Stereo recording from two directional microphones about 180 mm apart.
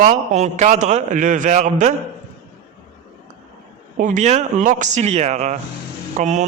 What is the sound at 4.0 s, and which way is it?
Speech, 45° right (ahead or behind).